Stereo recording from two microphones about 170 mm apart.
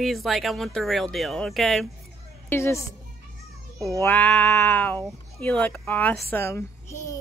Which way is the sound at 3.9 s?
10° left (ahead or behind).